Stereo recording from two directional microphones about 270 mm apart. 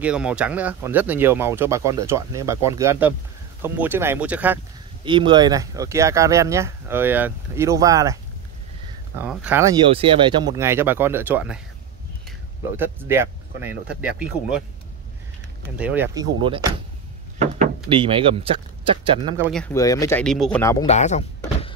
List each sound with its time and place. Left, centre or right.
0.0 s speech: centre
5.0 s speech: centre
9.2 s speech: centre
9.8 s speech: centre
15.8 s speech: centre
16.4 s speech: centre
17.8 s speech: centre
19.4 s speech: centre
20.8 s door: left